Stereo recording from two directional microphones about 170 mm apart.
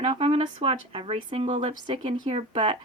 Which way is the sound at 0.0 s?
30° right (ahead or behind).